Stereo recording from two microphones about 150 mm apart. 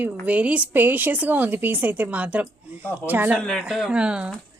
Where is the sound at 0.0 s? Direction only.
10° right (ahead or behind).